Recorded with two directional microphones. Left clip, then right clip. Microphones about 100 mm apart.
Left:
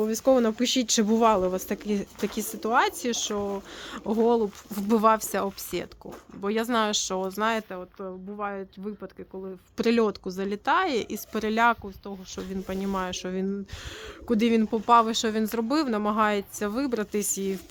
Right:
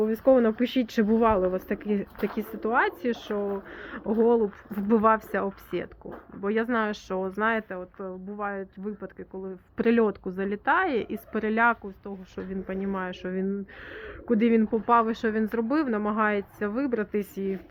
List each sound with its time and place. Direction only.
0.0 s speech: 45° left (ahead or behind)
1.5 s speech: 60° left (ahead or behind)
7.2 s speech: 50° left (ahead or behind)
8.4 s speech: 35° left (ahead or behind)
9.0 s speech: 20° left (ahead or behind)
9.7 s speech: 40° left (ahead or behind); by 17.6 s 70° left (ahead or behind)